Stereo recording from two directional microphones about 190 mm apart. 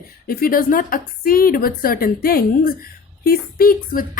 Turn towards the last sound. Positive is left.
turn(degrees=50)  # may be behind; listen again after turning